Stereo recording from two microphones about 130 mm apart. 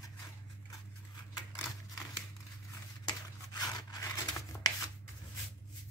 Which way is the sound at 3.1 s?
30° left (ahead or behind).